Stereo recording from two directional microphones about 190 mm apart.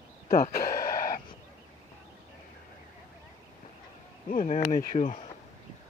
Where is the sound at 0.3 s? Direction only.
50° left (ahead or behind).